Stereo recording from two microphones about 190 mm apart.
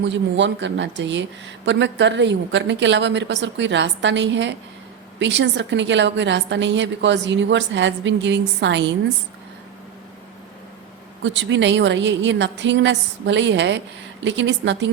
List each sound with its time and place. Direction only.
0.0 s a woman's voice: 70° right (ahead or behind)
11.2 s a woman's voice: 75° right (ahead or behind)